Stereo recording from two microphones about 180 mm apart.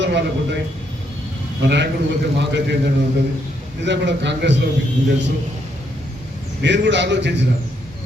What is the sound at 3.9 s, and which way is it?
Speech, 75° right (ahead or behind).